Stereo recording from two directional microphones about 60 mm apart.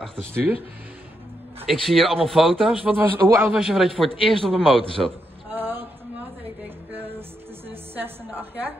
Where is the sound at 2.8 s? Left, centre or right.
Right.